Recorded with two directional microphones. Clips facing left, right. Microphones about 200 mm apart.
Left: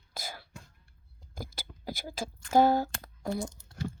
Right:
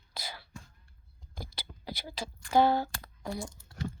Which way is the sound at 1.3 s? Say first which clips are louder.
Left 2 dB; 45° left (ahead or behind).